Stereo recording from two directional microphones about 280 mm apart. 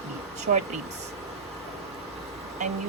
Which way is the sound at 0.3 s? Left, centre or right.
Right.